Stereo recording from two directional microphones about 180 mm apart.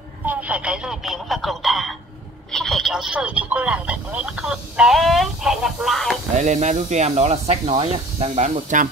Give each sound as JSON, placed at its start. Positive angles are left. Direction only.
{"t": 0.3, "sound": "speech", "side_deg": -10}
{"t": 6.3, "sound": "speech", "side_deg": -40}